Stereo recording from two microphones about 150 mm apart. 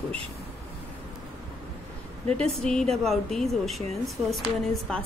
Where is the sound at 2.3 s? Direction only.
5° left (ahead or behind).